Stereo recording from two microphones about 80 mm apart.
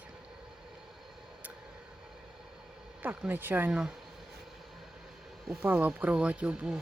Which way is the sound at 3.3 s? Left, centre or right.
Right.